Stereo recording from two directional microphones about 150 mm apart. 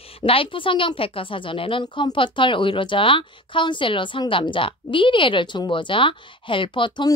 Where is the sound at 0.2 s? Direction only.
35° left (ahead or behind).